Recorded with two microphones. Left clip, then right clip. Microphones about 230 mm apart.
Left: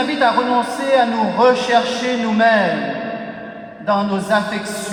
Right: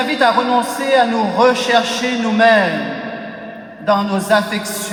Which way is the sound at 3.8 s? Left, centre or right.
Right.